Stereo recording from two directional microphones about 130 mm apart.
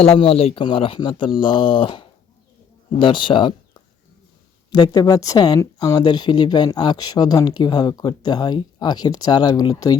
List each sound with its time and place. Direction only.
0.0 s speech: 50° left (ahead or behind); by 10.0 s 30° left (ahead or behind)